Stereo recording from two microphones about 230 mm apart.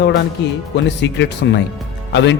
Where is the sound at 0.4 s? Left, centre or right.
Left.